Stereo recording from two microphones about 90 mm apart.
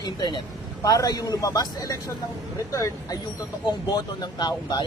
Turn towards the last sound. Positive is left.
turn(degrees=50)  # may be behind; listen again after turning